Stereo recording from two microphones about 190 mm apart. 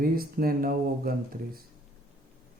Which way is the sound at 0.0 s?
50° right (ahead or behind).